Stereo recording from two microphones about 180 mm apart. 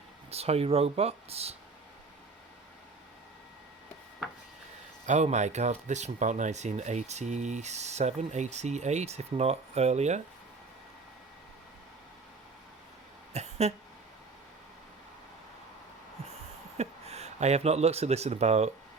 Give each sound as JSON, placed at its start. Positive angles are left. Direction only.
{"t": 0.3, "sound": "speech", "side_deg": -35}
{"t": 5.0, "sound": "speech", "side_deg": -40}
{"t": 13.3, "sound": "a sound", "side_deg": -35}
{"t": 16.7, "sound": "speech", "side_deg": -35}